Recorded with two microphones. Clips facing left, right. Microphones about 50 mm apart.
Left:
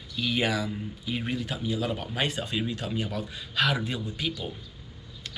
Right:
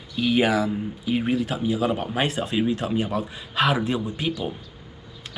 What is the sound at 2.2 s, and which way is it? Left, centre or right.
Speech, centre.